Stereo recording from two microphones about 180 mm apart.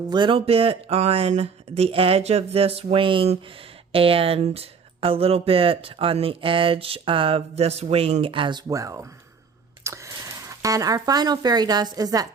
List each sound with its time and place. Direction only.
0.1 s speech: 25° right (ahead or behind)